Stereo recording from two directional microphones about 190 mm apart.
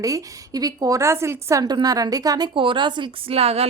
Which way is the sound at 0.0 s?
20° right (ahead or behind).